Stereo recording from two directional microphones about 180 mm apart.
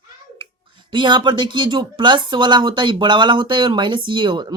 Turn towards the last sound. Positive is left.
turn(degrees=-25)  # may be behind; listen again after turning